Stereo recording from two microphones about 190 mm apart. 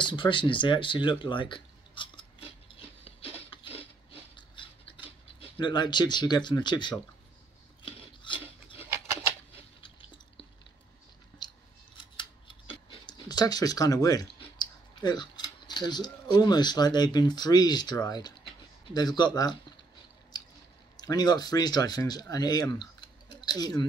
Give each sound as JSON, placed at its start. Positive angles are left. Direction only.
{"t": 0.0, "sound": "speech", "side_deg": 25}
{"t": 2.7, "sound": "rub", "side_deg": 30}
{"t": 3.4, "sound": "a sound", "side_deg": 30}
{"t": 7.8, "sound": "filing", "side_deg": 25}
{"t": 9.8, "sound": "a sound", "side_deg": 25}
{"t": 11.4, "sound": "scissors", "side_deg": 20}
{"t": 14.6, "sound": "speech", "side_deg": 20}
{"t": 20.9, "sound": "speech", "side_deg": 20}